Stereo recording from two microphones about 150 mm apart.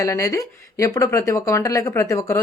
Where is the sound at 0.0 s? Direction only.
20° left (ahead or behind).